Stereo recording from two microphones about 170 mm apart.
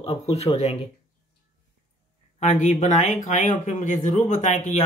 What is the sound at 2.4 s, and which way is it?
Speech, 40° left (ahead or behind).